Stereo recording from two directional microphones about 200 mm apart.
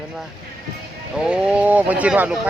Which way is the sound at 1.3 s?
5° right (ahead or behind).